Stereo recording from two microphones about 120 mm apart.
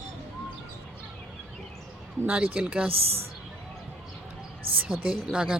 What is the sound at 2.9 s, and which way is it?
Speech, 55° right (ahead or behind).